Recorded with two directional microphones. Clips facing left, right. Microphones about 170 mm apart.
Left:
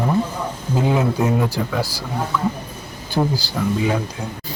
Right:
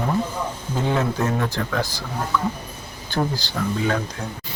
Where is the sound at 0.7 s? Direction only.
10° left (ahead or behind).